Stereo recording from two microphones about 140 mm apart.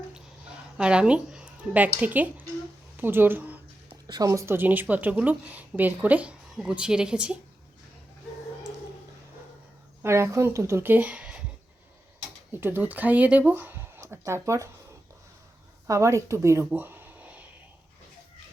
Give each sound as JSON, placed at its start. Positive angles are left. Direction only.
{"t": 0.8, "sound": "speech", "side_deg": -5}
{"t": 3.0, "sound": "a sound", "side_deg": -15}
{"t": 4.0, "sound": "speech", "side_deg": -25}
{"t": 10.0, "sound": "speech", "side_deg": -20}
{"t": 12.5, "sound": "speech", "side_deg": -15}
{"t": 15.9, "sound": "speech", "side_deg": -20}
{"t": 16.6, "sound": "a sound", "side_deg": -10}